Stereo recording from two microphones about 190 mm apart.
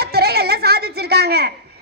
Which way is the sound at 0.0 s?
55° right (ahead or behind).